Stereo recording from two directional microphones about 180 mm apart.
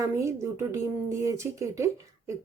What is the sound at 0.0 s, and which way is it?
Speech, 15° right (ahead or behind).